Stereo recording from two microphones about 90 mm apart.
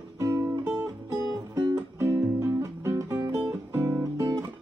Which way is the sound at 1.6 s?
30° right (ahead or behind).